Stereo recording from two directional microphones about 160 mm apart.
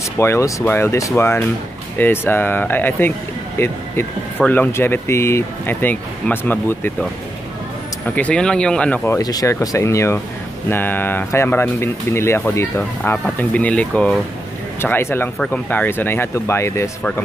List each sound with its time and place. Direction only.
0.2 s speech: 15° left (ahead or behind)
8.1 s speech: 5° left (ahead or behind)